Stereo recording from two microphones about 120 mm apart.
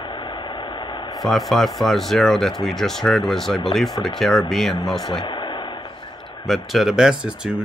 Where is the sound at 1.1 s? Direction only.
Centre (ahead or behind).